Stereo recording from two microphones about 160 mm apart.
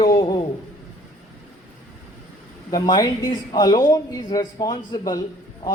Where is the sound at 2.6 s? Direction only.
25° left (ahead or behind).